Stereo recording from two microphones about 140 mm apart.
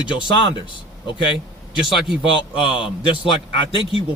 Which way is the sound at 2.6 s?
40° left (ahead or behind).